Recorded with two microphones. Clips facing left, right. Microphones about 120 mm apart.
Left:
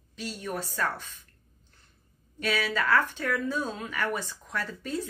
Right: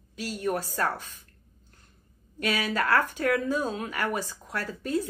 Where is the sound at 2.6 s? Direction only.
45° right (ahead or behind).